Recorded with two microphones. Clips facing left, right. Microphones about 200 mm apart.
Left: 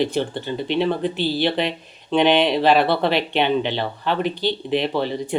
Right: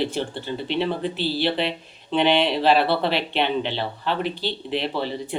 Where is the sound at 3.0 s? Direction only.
50° left (ahead or behind).